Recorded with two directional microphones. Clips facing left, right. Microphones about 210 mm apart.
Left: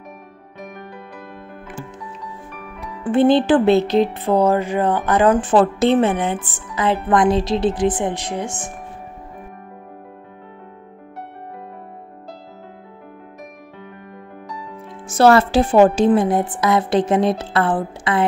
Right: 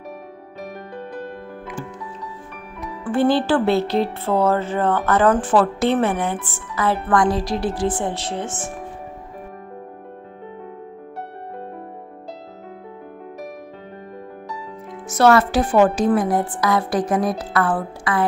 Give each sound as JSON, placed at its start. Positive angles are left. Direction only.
{"t": 3.0, "sound": "speech", "side_deg": 20}
{"t": 15.0, "sound": "speech", "side_deg": 30}